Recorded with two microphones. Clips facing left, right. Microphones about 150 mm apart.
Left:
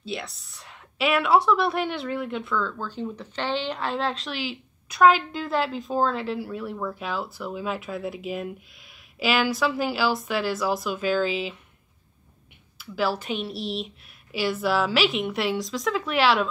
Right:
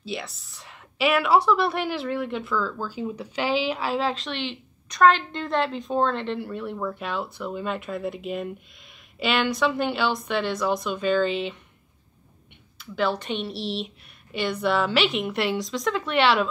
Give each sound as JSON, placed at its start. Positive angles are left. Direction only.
{"t": 0.0, "sound": "a woman's voice", "side_deg": 0}
{"t": 12.7, "sound": "a woman's voice", "side_deg": 5}